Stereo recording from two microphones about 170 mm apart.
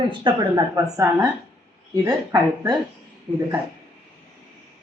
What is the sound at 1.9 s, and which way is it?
Speech, 20° right (ahead or behind).